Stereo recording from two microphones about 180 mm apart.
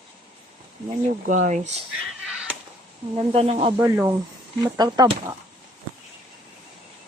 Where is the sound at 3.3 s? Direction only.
35° right (ahead or behind).